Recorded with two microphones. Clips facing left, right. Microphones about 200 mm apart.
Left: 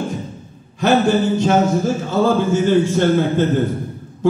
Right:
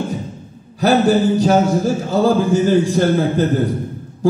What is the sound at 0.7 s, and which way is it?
A man's voice, 35° right (ahead or behind).